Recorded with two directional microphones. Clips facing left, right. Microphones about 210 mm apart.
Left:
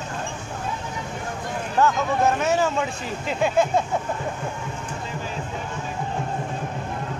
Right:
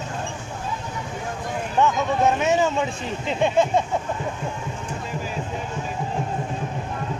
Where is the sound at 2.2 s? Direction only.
20° right (ahead or behind).